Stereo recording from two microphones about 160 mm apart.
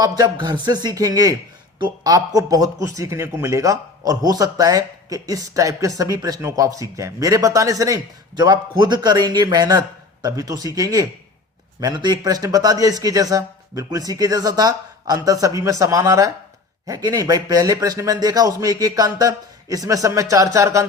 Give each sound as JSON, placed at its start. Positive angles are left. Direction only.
{"t": 0.0, "sound": "a man's voice", "side_deg": -25}